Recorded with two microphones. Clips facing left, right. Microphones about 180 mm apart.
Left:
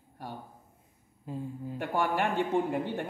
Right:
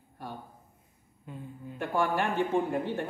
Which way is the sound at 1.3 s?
35° left (ahead or behind).